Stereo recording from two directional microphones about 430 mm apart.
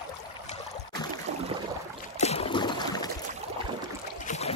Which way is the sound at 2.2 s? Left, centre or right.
Centre.